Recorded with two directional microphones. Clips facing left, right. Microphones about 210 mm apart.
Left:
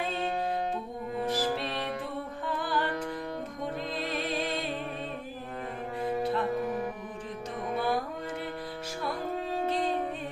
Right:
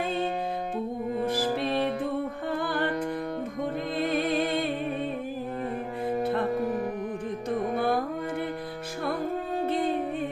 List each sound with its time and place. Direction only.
1.2 s music: 55° right (ahead or behind)
3.9 s music: 55° right (ahead or behind)